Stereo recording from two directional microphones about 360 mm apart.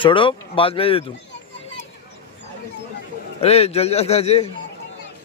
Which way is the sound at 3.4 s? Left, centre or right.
Centre.